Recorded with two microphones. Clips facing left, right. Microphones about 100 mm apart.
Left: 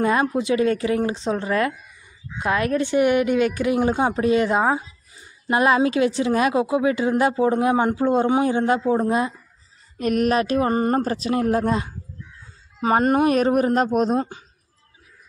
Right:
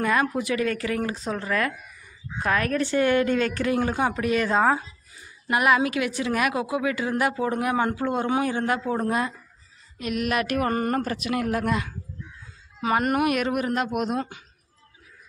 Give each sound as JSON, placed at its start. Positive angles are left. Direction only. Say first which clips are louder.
{"t": 0.0, "sound": "a woman's voice", "louder": "left 3 dB", "side_deg": 25}
{"t": 5.5, "sound": "a woman's voice", "louder": "left 3 dB", "side_deg": 30}
{"t": 9.9, "sound": "speech", "louder": "left 7 dB", "side_deg": 45}
{"t": 10.3, "sound": "a woman's voice", "louder": "left 4 dB", "side_deg": 25}